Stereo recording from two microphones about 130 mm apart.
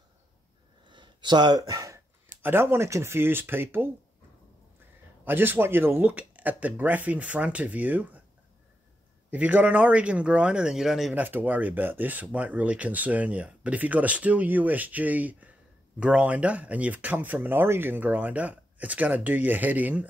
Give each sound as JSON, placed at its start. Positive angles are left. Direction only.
{"t": 0.8, "sound": "a sound", "side_deg": -35}
{"t": 2.4, "sound": "speech", "side_deg": -15}
{"t": 5.2, "sound": "speech", "side_deg": -15}
{"t": 9.3, "sound": "speech", "side_deg": -10}
{"t": 11.1, "sound": "speech", "side_deg": -15}